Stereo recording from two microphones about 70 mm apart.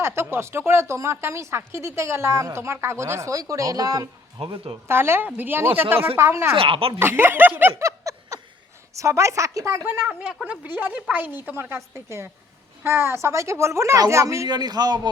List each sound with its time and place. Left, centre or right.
0.0 s a woman's voice: right
4.9 s a woman's voice: right
7.8 s snicker: right
9.0 s a woman's voice: right
10.5 s a woman's voice: right
14.4 s a man's voice: right